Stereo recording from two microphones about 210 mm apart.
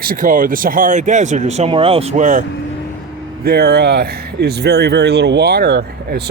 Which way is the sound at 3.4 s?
50° right (ahead or behind).